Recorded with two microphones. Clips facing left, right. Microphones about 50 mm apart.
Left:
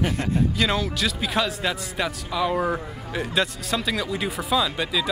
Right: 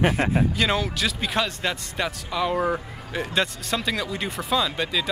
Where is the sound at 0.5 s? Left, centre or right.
Centre.